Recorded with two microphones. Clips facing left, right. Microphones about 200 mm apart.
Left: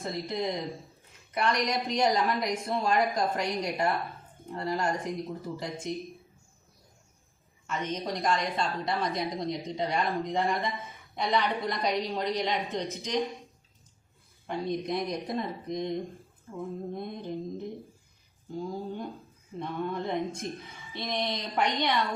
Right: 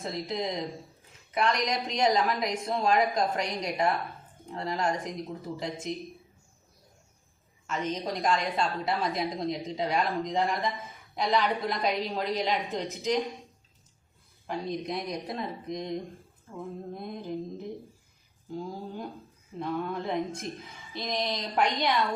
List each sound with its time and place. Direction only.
0.0 s a woman's voice: centre (ahead or behind)
7.7 s a woman's voice: centre (ahead or behind)
14.5 s a woman's voice: centre (ahead or behind)
18.5 s a woman's voice: centre (ahead or behind)